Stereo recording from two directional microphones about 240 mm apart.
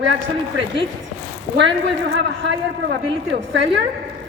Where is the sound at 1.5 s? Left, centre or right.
Right.